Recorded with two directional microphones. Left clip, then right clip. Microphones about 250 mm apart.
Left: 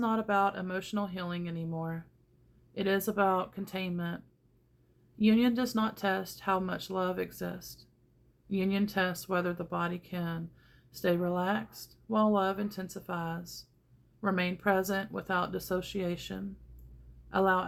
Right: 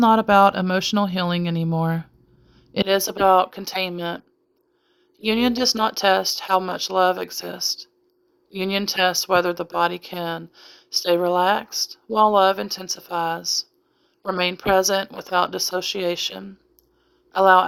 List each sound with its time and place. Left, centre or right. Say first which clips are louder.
0.0 s speech: right 14 dB; right
5.2 s speech: right 9 dB; right